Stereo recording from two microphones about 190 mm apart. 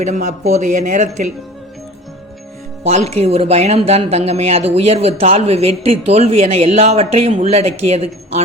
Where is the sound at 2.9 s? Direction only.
35° right (ahead or behind).